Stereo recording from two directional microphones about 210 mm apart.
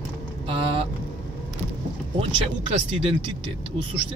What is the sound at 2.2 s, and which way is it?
Speech, 25° right (ahead or behind).